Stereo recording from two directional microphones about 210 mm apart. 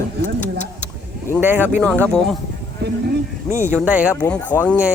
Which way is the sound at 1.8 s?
5° left (ahead or behind).